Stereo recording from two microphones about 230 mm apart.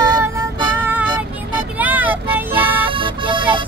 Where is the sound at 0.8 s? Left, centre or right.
Centre.